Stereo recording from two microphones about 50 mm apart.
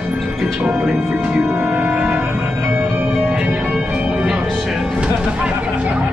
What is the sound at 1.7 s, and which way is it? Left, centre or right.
Music, right.